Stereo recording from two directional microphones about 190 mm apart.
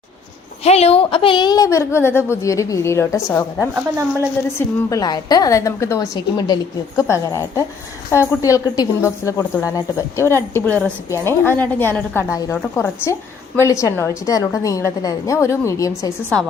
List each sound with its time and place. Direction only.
0.6 s a woman's voice: 35° left (ahead or behind); by 16.1 s 15° left (ahead or behind)